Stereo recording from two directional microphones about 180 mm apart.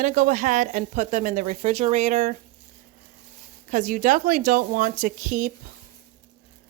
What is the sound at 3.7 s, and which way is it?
Speech, 45° right (ahead or behind).